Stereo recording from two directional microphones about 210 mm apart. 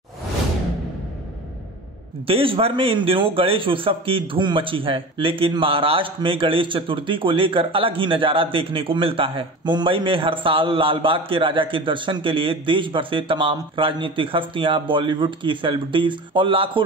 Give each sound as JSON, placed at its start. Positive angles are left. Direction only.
{"t": 2.2, "sound": "a man's voice", "side_deg": -25}